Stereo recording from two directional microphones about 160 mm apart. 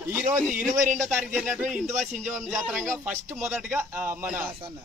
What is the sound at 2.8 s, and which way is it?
Speech, 15° right (ahead or behind).